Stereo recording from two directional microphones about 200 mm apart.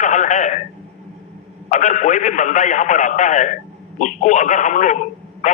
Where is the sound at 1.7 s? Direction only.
40° left (ahead or behind).